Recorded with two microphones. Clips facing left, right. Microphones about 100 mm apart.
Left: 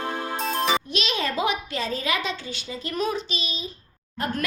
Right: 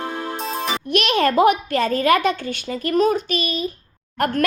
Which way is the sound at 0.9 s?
60° right (ahead or behind).